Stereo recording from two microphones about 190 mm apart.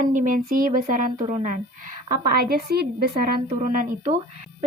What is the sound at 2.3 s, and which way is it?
A woman's voice, 55° right (ahead or behind).